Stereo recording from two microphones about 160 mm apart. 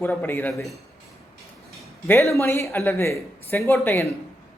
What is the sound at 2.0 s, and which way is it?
Speech, 15° left (ahead or behind).